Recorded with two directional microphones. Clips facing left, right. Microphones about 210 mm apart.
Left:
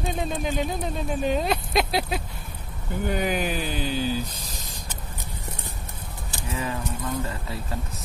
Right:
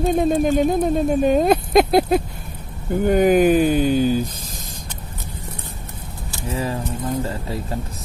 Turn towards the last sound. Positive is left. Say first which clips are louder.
# right 6 dB
turn(degrees=-30)  # may be behind; listen again after turning